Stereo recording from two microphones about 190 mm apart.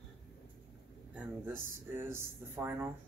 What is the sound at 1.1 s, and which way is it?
Speech, 10° right (ahead or behind).